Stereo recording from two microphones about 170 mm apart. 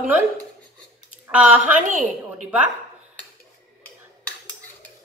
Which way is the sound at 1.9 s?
50° right (ahead or behind).